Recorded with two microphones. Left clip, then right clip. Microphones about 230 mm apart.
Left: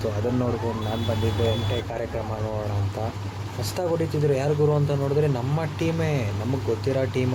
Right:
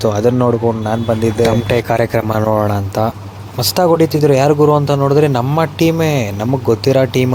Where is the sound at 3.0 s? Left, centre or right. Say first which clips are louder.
Right 14 dB; right.